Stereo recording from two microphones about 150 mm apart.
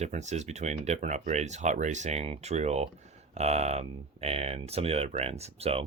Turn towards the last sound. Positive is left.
turn(degrees=-40)  # may be behind; listen again after turning